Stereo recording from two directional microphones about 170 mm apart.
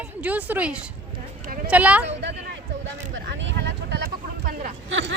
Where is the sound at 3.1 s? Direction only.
90° right; by 4.6 s 65° right (ahead or behind).